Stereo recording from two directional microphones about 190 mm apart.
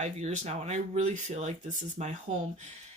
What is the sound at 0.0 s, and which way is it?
Speech, 35° right (ahead or behind).